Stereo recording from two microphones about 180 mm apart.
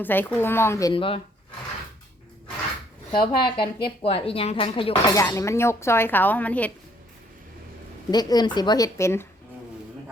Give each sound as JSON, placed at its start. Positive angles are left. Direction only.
{"t": 0.0, "sound": "speech", "side_deg": 10}
{"t": 0.9, "sound": "a woman's voice", "side_deg": 30}
{"t": 3.1, "sound": "a woman's voice", "side_deg": 25}
{"t": 5.1, "sound": "speech", "side_deg": 15}
{"t": 8.1, "sound": "a woman's voice", "side_deg": 20}